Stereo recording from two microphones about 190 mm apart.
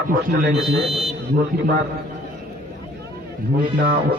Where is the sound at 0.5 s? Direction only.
Centre (ahead or behind).